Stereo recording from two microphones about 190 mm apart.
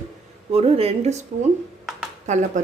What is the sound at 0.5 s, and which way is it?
Speech, 30° right (ahead or behind).